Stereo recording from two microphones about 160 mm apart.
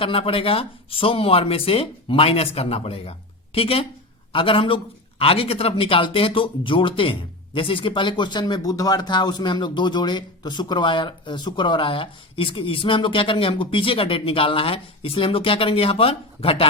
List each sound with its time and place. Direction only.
0.0 s speech: 35° left (ahead or behind)